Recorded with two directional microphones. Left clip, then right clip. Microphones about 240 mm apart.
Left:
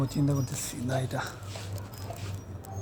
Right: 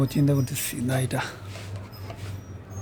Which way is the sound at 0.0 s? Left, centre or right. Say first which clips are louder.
Right 6 dB; right.